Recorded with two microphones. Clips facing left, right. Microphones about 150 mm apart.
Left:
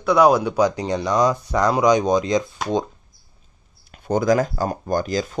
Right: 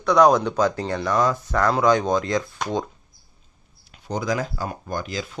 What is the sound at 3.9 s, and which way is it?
Speech, 50° left (ahead or behind).